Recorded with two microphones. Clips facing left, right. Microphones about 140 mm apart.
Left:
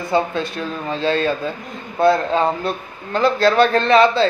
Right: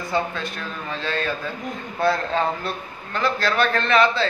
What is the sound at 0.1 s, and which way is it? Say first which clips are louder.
A man's voice: left 6 dB; 30° left (ahead or behind).